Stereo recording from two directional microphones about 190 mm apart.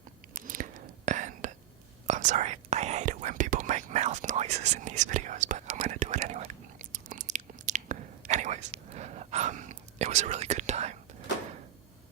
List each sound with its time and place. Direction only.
0.3 s whispering: 45° right (ahead or behind)